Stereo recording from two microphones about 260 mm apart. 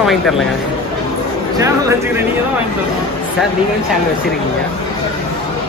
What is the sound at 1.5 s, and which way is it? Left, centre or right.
Speech, centre.